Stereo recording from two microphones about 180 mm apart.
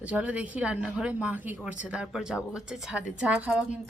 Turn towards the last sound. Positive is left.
turn(degrees=-5)  # may be behind; listen again after turning